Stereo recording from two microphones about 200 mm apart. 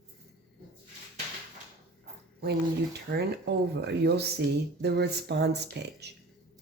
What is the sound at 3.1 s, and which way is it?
Speech, 55° right (ahead or behind).